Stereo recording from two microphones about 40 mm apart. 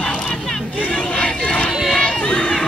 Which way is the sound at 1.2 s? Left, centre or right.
Left.